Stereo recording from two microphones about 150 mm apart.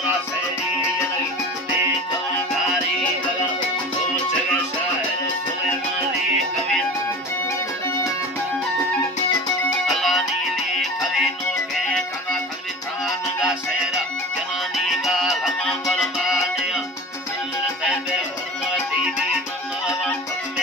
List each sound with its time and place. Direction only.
9.8 s music: centre (ahead or behind)
15.0 s music: centre (ahead or behind)